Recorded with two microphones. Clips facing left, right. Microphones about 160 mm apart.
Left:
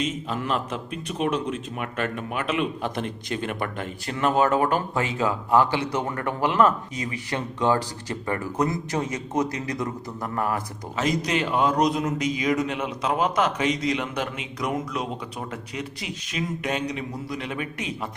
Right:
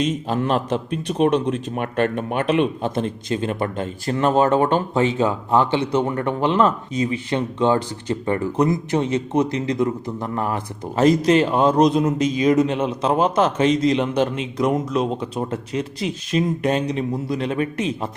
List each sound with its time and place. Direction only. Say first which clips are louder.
0.3 s a man's voice: right 7 dB; 35° right (ahead or behind)